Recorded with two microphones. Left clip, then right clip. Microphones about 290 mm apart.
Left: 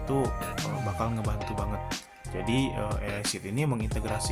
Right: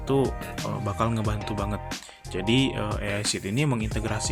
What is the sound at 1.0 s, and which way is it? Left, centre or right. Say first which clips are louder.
Speech: right 7 dB; left.